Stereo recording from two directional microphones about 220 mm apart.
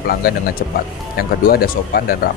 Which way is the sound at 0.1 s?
45° left (ahead or behind).